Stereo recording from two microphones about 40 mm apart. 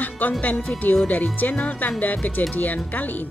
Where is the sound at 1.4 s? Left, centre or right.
Left.